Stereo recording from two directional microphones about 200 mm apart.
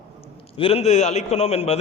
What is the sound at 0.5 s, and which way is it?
A man's voice, 30° left (ahead or behind).